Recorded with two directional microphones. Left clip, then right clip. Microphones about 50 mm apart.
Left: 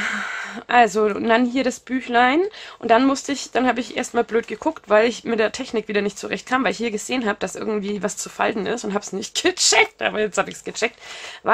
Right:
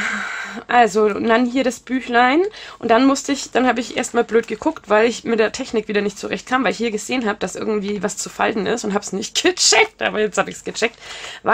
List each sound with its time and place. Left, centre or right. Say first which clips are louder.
0.0 s speech: right 2 dB; centre
9.2 s speech: right 3 dB; centre